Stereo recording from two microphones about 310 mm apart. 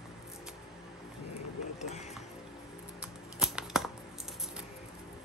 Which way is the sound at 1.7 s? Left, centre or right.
Left.